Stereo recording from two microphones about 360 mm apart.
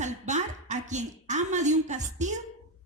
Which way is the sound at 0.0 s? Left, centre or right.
Centre.